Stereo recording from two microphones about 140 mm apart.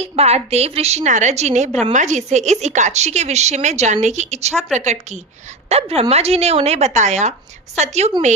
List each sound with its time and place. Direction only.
0.0 s a woman's voice: 50° right (ahead or behind)